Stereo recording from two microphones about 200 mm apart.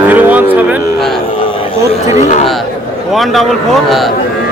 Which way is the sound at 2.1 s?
35° left (ahead or behind).